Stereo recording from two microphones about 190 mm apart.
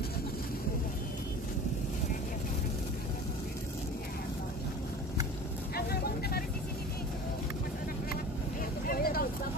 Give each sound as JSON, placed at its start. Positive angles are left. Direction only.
{"t": 5.8, "sound": "vehicle", "side_deg": 55}
{"t": 8.8, "sound": "vehicle", "side_deg": 50}